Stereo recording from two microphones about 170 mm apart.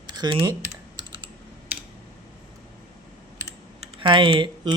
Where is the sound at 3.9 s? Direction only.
30° right (ahead or behind).